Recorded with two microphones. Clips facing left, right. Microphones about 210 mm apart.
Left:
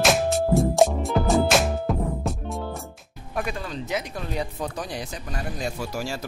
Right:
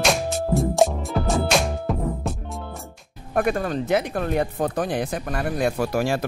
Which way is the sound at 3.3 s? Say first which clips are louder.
Right 8 dB; 55° right (ahead or behind).